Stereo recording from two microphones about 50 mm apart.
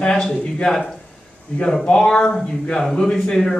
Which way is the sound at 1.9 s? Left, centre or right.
Centre.